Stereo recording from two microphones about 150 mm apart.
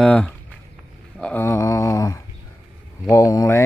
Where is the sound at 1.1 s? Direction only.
5° left (ahead or behind).